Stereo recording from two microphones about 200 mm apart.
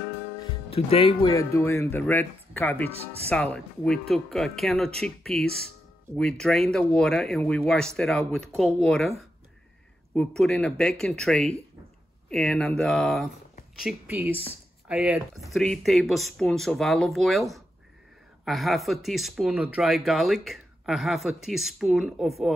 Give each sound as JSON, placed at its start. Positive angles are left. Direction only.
{"t": 0.7, "sound": "speech", "side_deg": 30}
{"t": 1.3, "sound": "speech", "side_deg": 15}
{"t": 10.1, "sound": "speech", "side_deg": 0}